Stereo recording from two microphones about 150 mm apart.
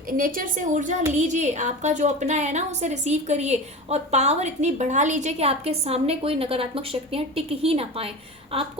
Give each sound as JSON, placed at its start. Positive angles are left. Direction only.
{"t": 0.1, "sound": "a woman's voice", "side_deg": -70}